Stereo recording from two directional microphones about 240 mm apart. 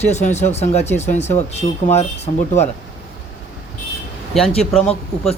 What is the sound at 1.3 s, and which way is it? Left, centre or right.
Speech, left.